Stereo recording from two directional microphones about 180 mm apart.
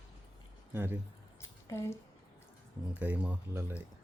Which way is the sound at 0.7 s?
15° right (ahead or behind).